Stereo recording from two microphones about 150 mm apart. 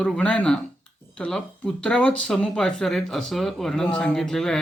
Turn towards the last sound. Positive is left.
turn(degrees=5)  # may be behind; listen again after turning